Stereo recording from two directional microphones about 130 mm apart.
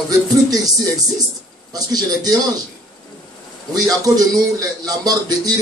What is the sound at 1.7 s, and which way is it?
Speech, 30° right (ahead or behind).